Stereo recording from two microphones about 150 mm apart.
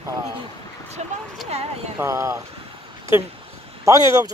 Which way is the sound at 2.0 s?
20° right (ahead or behind).